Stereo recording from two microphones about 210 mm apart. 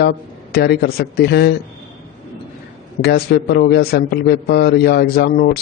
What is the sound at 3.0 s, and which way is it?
A man's voice, 50° left (ahead or behind).